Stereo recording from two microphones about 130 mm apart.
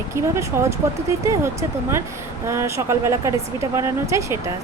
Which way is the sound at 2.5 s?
20° right (ahead or behind).